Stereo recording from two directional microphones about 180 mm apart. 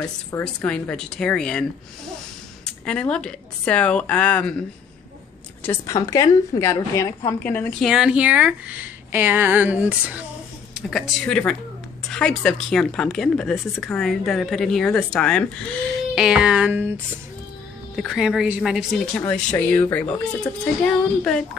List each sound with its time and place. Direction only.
0.4 s a woman's voice: 5° left (ahead or behind)
7.9 s speech: 5° right (ahead or behind)